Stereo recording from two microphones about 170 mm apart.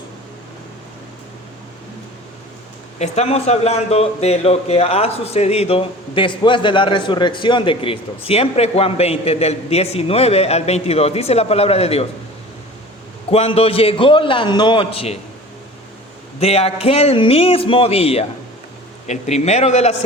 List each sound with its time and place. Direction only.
3.0 s a man's voice: 40° left (ahead or behind)
13.3 s a man's voice: 35° left (ahead or behind)
16.4 s a man's voice: 35° left (ahead or behind)